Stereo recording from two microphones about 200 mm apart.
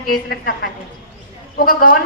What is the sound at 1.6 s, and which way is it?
Speech, 45° left (ahead or behind).